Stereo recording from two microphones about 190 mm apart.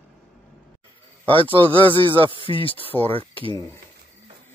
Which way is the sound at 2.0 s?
25° right (ahead or behind).